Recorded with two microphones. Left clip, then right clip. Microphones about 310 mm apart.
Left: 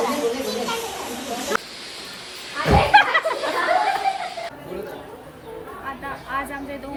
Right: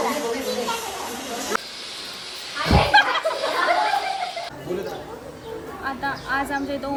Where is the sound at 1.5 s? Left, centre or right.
Centre.